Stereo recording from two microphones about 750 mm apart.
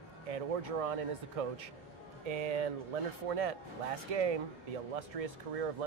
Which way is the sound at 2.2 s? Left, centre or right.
Right.